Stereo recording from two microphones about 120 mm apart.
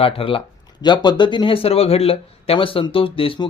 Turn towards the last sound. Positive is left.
turn(degrees=50)  # may be behind; listen again after turning